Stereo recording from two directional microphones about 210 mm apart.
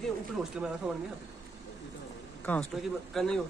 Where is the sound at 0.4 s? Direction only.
5° right (ahead or behind).